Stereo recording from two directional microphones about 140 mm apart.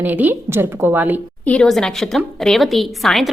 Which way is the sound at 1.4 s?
5° left (ahead or behind).